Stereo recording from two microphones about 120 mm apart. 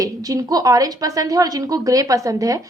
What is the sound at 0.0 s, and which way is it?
A woman's voice, 30° right (ahead or behind).